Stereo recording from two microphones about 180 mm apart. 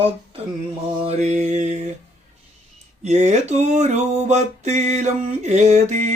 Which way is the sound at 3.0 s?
40° right (ahead or behind).